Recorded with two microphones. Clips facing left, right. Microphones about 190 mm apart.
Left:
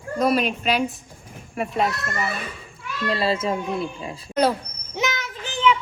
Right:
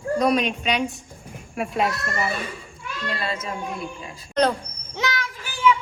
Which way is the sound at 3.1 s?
30° left (ahead or behind).